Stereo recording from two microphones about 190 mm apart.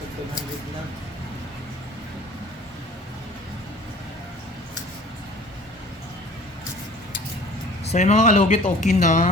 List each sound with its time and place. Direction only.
7.9 s speech: 35° left (ahead or behind)